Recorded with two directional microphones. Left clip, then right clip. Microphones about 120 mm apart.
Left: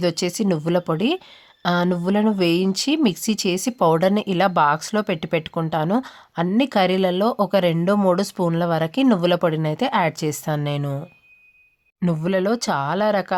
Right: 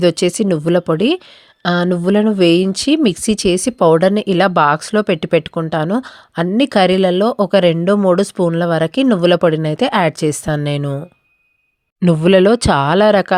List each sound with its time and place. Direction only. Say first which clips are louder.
0.0 s speech: right 8 dB; 40° right (ahead or behind)
12.0 s speech: right 11 dB; 65° right (ahead or behind)